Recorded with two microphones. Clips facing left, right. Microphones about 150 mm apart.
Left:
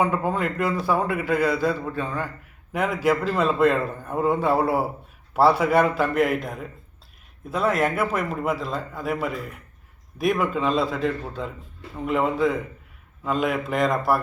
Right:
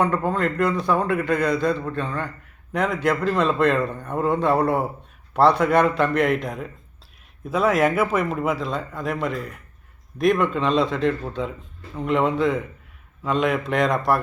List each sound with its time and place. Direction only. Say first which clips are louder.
0.0 s a man's voice: right 1 dB; 5° left (ahead or behind)